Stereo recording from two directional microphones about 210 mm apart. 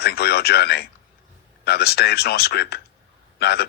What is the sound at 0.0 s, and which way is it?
Speech, 50° left (ahead or behind).